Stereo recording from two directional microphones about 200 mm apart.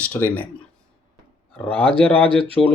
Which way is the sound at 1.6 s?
5° left (ahead or behind).